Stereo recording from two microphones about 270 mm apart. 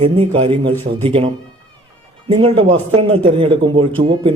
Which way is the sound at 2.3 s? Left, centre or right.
Centre.